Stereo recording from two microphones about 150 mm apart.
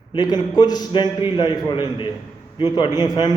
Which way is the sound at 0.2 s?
25° left (ahead or behind).